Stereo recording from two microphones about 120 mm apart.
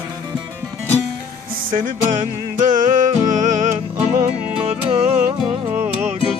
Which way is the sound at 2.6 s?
90° right.